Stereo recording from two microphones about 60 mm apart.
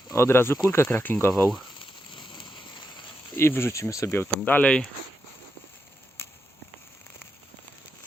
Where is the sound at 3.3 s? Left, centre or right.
Left.